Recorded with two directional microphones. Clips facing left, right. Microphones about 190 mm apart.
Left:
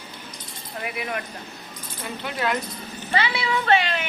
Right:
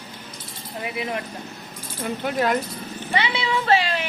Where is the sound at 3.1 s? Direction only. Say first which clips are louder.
Even; 20° right (ahead or behind).